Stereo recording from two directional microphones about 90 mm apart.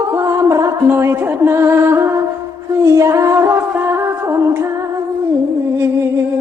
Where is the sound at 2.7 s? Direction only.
35° right (ahead or behind).